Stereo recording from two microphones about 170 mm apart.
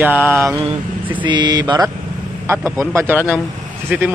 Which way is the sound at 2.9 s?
10° right (ahead or behind).